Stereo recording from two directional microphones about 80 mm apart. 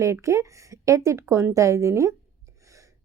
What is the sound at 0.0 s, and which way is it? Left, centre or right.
A woman's voice, right.